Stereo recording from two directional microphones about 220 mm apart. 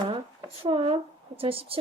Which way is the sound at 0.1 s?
25° right (ahead or behind).